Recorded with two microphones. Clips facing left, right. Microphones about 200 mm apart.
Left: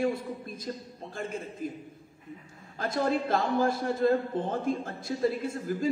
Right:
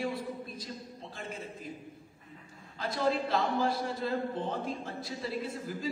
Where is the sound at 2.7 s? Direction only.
50° left (ahead or behind).